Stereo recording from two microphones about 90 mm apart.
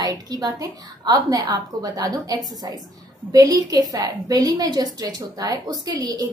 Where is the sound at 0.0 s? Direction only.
45° right (ahead or behind).